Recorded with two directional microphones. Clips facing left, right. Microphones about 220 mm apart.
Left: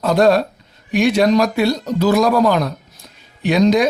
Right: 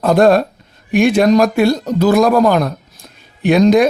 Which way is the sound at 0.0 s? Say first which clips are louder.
Right 3 dB; 50° right (ahead or behind).